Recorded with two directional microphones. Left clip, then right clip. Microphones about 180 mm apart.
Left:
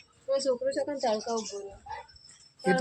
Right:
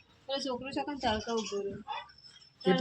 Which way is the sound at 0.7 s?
40° right (ahead or behind).